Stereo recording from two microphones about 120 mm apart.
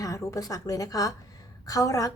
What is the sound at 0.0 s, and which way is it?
A woman's voice, 25° left (ahead or behind).